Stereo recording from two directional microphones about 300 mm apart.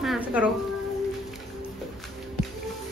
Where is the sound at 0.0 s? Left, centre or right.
Centre.